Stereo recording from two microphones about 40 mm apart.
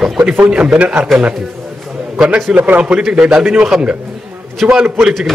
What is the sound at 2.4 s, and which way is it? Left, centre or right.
Speech, right.